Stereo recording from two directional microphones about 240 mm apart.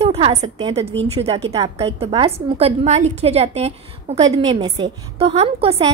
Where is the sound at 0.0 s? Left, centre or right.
Right.